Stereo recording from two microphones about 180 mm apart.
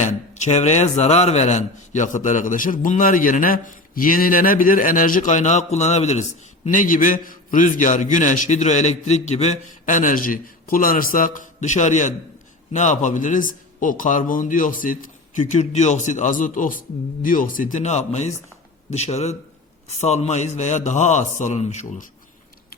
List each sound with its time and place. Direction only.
0.1 s a man's voice: 40° left (ahead or behind)